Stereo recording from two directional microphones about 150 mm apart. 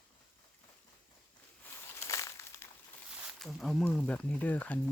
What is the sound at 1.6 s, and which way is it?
Crumpling, 20° left (ahead or behind).